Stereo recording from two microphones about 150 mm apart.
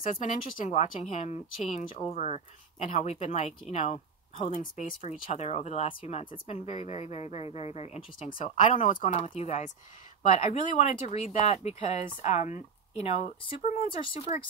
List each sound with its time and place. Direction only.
0.0 s speech: 60° left (ahead or behind); by 8.5 s 40° left (ahead or behind)
8.5 s speech: 55° left (ahead or behind)
9.0 s speech: 40° left (ahead or behind)